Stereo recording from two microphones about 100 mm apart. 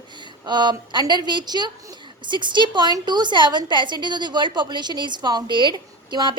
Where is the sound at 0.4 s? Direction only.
45° right (ahead or behind).